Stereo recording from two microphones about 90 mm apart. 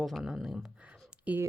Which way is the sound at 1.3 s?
15° right (ahead or behind).